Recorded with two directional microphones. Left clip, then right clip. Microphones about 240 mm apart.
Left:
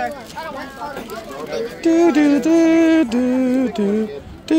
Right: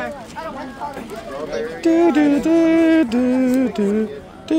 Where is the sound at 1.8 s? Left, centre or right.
Centre.